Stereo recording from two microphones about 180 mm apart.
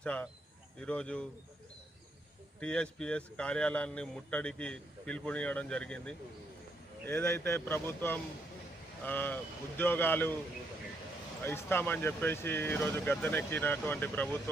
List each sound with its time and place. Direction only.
0.0 s a man's voice: 5° left (ahead or behind)
2.6 s a man's voice: 5° left (ahead or behind)
7.0 s a man's voice: 15° left (ahead or behind)
11.4 s speech: 10° left (ahead or behind)